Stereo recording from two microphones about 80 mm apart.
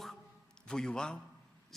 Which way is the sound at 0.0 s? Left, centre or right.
Centre.